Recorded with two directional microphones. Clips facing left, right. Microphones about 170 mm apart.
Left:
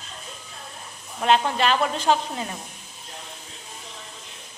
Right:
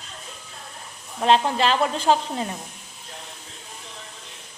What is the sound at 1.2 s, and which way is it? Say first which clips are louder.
A woman's voice: right 1 dB; 30° right (ahead or behind).